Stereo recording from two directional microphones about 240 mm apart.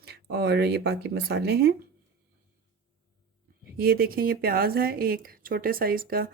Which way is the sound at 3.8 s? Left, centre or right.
Right.